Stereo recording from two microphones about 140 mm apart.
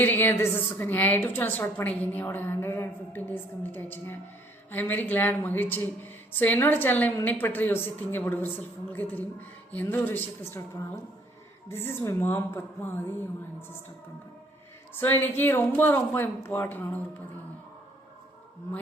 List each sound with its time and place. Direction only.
0.0 s a woman's voice: 15° left (ahead or behind)
11.7 s a woman's voice: 15° left (ahead or behind)
14.9 s a woman's voice: 15° left (ahead or behind)